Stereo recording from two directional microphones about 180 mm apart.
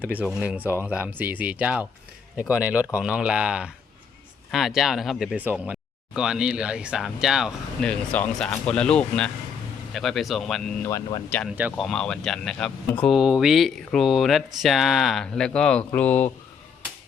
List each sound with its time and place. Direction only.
0.1 s speech: 10° right (ahead or behind)
10.8 s speech: 15° left (ahead or behind)
11.5 s speech: 10° right (ahead or behind)
11.9 s speech: 5° left (ahead or behind)